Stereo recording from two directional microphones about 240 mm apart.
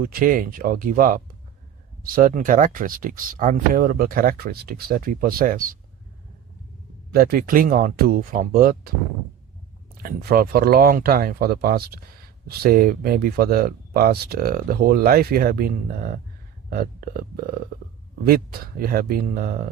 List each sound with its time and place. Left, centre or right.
0.0 s speech: right
7.1 s speech: right
10.0 s speech: right